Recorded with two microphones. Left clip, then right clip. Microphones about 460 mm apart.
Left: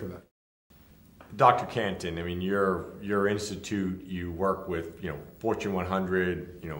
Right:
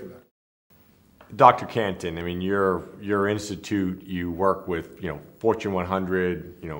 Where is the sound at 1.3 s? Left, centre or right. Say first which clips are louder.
Right 5 dB; right.